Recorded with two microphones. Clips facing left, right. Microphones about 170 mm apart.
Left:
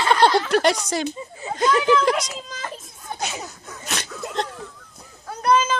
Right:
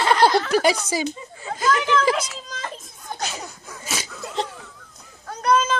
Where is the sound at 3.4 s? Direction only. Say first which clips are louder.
Left 1 dB; 5° right (ahead or behind).